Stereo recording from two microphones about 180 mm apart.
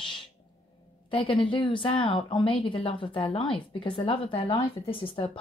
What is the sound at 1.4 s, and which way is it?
Speech, 30° left (ahead or behind).